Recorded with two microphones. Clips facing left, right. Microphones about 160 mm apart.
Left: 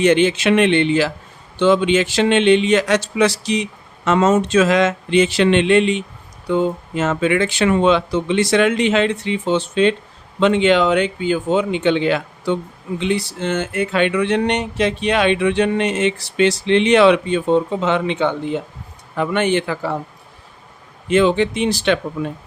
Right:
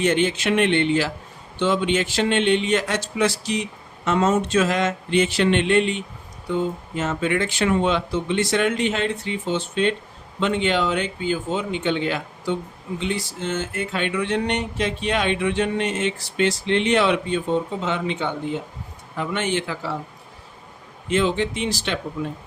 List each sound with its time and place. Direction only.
0.0 s a man's voice: 80° left
6.5 s a man's voice: 80° left; by 20.0 s 55° left (ahead or behind)
21.1 s a man's voice: 65° left (ahead or behind)